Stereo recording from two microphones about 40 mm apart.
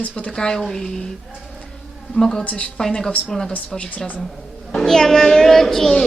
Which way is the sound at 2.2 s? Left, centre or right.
Centre.